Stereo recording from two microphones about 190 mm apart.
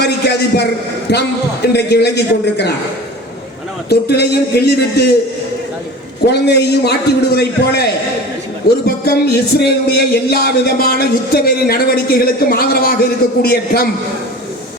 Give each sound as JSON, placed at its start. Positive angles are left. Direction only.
{"t": 0.0, "sound": "a man's voice", "side_deg": 60}
{"t": 3.8, "sound": "a man's voice", "side_deg": 60}
{"t": 6.2, "sound": "a man's voice", "side_deg": 60}